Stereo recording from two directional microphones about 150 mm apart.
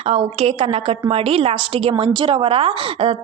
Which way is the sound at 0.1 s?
40° right (ahead or behind).